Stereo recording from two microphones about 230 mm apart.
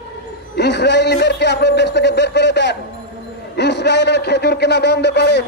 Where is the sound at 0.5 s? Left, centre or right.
Left.